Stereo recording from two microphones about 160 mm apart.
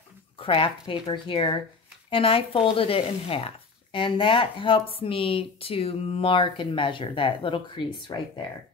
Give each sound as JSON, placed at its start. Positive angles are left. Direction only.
{"t": 0.4, "sound": "speech", "side_deg": 35}